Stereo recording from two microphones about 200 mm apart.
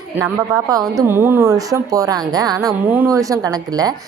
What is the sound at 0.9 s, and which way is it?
Speech, 10° right (ahead or behind).